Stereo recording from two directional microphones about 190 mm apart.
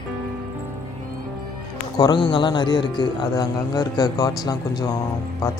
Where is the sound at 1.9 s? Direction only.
20° left (ahead or behind).